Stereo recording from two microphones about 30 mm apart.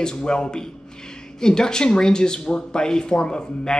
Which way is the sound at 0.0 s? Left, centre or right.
Left.